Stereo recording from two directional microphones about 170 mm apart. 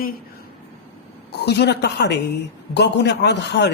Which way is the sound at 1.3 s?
80° left.